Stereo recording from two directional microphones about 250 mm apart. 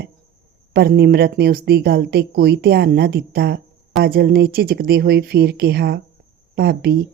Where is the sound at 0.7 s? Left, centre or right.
Right.